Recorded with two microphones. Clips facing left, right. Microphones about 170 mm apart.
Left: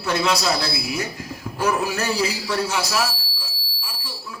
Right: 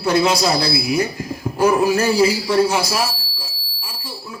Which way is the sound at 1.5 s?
50° right (ahead or behind).